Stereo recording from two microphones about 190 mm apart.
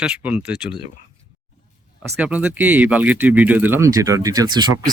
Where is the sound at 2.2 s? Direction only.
5° right (ahead or behind).